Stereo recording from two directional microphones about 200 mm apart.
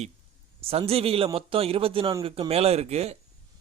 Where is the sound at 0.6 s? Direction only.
30° right (ahead or behind).